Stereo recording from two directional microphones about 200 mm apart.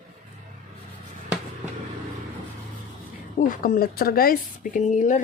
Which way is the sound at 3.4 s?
45° left (ahead or behind).